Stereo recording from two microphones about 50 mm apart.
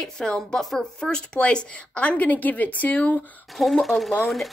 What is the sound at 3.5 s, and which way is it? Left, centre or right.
Speech, centre.